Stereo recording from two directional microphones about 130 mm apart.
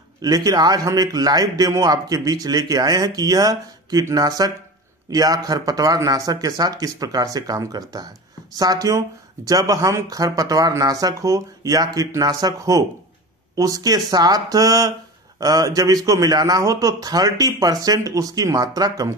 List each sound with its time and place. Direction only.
0.2 s a man's voice: 30° right (ahead or behind)